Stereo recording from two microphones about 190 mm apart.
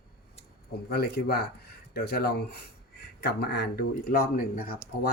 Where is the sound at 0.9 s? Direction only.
55° left (ahead or behind).